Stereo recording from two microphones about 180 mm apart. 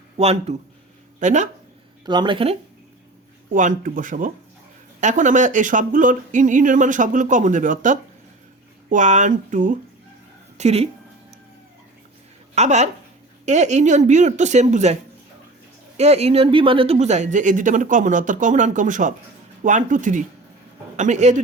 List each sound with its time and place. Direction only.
0.2 s a woman's voice: 35° right (ahead or behind)
2.0 s speech: 25° right (ahead or behind)
3.5 s a woman's voice: 45° right (ahead or behind)
12.5 s a woman's voice: 40° right (ahead or behind)
16.0 s a woman's voice: 35° right (ahead or behind)